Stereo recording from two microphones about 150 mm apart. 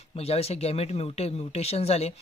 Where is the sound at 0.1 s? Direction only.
45° left (ahead or behind).